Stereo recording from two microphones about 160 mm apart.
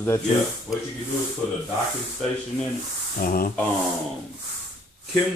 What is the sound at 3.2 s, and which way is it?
Speech, 65° left (ahead or behind).